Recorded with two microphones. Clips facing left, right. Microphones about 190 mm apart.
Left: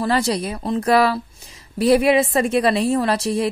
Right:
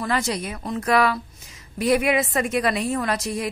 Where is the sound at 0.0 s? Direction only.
35° left (ahead or behind).